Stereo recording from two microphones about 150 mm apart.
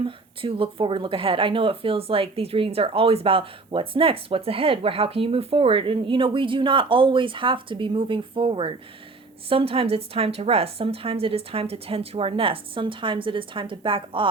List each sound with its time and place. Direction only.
0.0 s speech: 35° right (ahead or behind)